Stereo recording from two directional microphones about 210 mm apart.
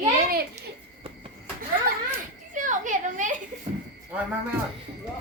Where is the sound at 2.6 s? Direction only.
35° right (ahead or behind).